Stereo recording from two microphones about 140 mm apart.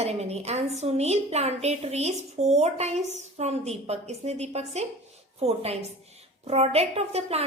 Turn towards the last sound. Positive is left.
turn(degrees=-50)  # may be behind; listen again after turning